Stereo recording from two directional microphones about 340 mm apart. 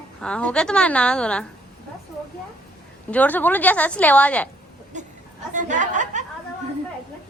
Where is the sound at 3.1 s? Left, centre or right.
Centre.